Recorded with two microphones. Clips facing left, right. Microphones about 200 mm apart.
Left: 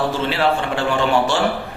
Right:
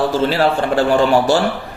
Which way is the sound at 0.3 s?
40° right (ahead or behind).